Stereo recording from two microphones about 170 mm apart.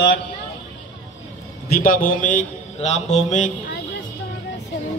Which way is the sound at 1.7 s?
60° left (ahead or behind).